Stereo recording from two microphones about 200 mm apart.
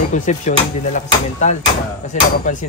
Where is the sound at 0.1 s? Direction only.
40° left (ahead or behind).